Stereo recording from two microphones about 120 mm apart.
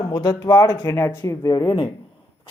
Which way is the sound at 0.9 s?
20° left (ahead or behind).